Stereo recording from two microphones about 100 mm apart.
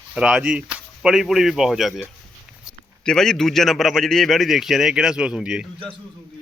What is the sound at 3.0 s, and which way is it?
A man's voice, 5° left (ahead or behind).